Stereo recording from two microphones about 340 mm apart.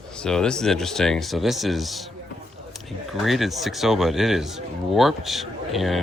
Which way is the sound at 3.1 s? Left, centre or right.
Centre.